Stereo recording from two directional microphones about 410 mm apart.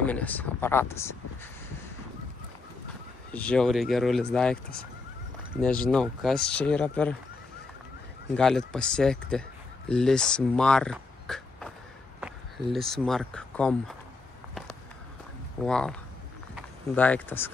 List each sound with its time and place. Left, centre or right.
0.0 s speech: centre
3.3 s speech: centre
5.6 s speech: centre
8.4 s speech: centre
15.6 s speech: centre